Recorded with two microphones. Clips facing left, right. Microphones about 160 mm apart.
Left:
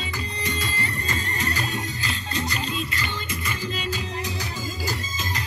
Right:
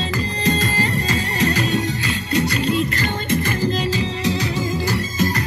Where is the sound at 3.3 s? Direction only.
85° right; by 5.4 s 60° right (ahead or behind).